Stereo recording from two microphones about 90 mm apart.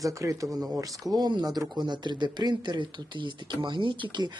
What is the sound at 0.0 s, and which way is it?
Speech, 35° right (ahead or behind).